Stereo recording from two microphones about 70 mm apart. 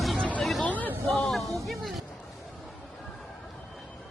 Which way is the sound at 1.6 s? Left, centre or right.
Centre.